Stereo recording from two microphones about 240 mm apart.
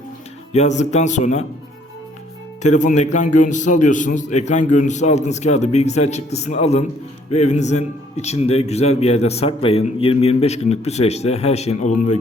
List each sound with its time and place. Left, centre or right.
0.5 s a man's voice: left
2.6 s a man's voice: left